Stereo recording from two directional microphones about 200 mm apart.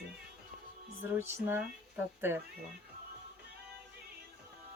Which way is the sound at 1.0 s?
10° right (ahead or behind).